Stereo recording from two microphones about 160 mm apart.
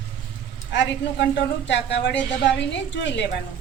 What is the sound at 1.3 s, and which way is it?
A woman's voice, 90° left.